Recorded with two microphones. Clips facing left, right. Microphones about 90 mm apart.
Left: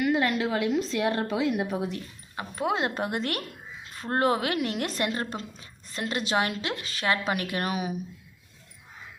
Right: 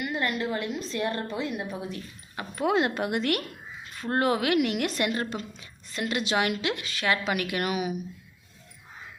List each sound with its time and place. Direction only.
0.0 s a woman's voice: 90° left; by 2.0 s 75° left (ahead or behind)
2.3 s speech: 25° left (ahead or behind)